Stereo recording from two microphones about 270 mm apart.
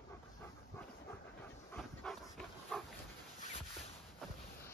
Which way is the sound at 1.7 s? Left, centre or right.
Centre.